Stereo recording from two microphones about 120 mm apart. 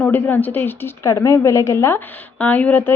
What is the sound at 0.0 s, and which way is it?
A woman's voice, 15° left (ahead or behind).